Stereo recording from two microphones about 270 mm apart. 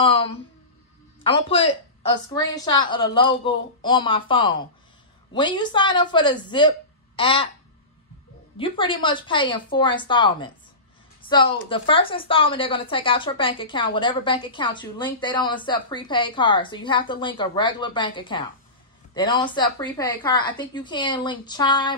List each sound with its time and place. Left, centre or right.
0.0 s a woman's voice: centre
7.2 s babbling: centre
8.5 s a woman's voice: centre